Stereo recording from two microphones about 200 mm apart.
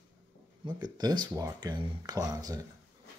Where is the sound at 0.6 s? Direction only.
20° right (ahead or behind).